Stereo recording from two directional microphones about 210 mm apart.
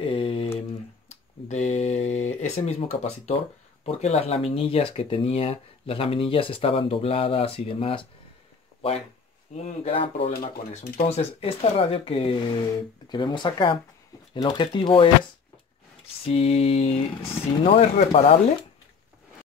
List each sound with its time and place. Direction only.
0.0 s a sound: 25° left (ahead or behind)
1.5 s a sound: 35° left (ahead or behind)
3.8 s speech: 30° left (ahead or behind)
9.5 s speech: 30° left (ahead or behind)
10.3 s speech: 45° left (ahead or behind); by 15.0 s 25° left (ahead or behind)
16.3 s speech: 30° left (ahead or behind)